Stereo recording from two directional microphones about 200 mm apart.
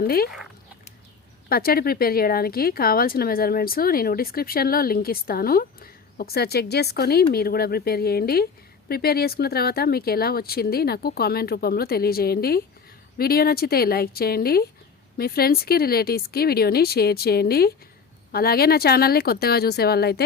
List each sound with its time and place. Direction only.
0.0 s speech: 50° left (ahead or behind)
1.5 s speech: 50° left (ahead or behind)